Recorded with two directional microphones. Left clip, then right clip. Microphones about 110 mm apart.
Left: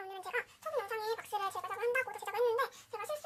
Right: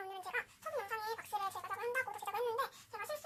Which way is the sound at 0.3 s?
25° left (ahead or behind).